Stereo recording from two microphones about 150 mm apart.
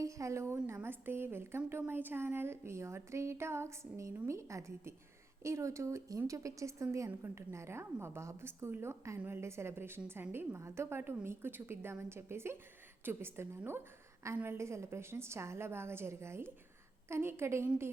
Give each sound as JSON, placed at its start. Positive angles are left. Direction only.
{"t": 0.0, "sound": "a woman's voice", "side_deg": -20}